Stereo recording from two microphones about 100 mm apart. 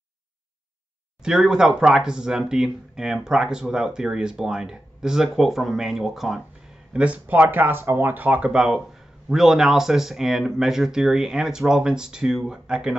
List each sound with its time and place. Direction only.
1.2 s speech: 5° right (ahead or behind)